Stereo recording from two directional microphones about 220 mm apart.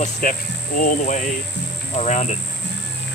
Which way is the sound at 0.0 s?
40° left (ahead or behind).